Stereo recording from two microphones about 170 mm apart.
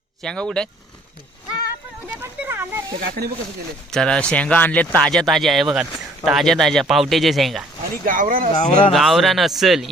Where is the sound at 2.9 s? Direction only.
65° right (ahead or behind).